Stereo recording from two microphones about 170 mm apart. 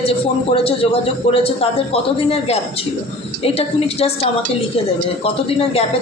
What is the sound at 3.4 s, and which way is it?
A man's voice, 35° left (ahead or behind).